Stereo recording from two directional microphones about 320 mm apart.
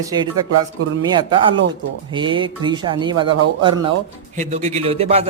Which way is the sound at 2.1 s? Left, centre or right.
Centre.